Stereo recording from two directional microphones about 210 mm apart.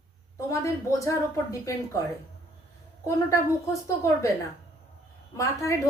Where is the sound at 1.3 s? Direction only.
15° left (ahead or behind).